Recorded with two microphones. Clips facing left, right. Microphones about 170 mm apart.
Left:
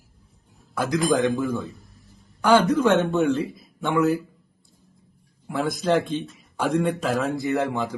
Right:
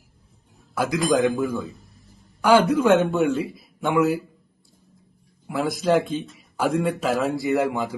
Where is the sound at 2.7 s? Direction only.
15° right (ahead or behind).